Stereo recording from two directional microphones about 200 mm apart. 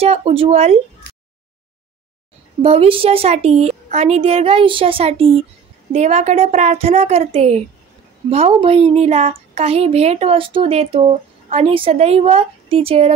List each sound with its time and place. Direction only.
0.0 s a woman's voice: 30° right (ahead or behind)
2.6 s a woman's voice: 30° right (ahead or behind)